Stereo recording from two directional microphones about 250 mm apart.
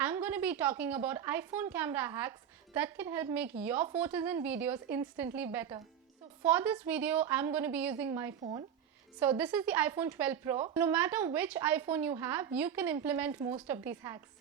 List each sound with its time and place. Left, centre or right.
0.0 s a woman's voice: centre
9.4 s a woman's voice: centre